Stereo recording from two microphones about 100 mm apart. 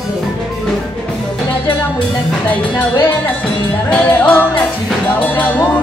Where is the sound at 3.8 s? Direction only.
15° left (ahead or behind).